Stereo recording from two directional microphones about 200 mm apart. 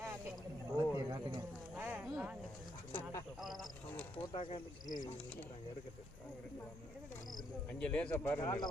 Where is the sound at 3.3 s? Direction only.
Centre (ahead or behind).